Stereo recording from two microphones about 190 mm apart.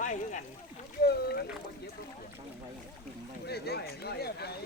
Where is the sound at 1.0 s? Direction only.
55° left (ahead or behind).